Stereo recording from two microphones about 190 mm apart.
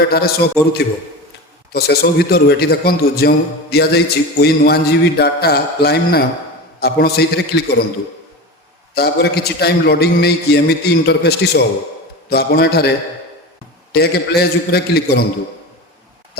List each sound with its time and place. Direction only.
0.1 s a man's voice: 55° left (ahead or behind)
1.7 s a man's voice: 55° left (ahead or behind)
9.0 s a man's voice: 55° left (ahead or behind)
13.9 s a man's voice: 55° left (ahead or behind)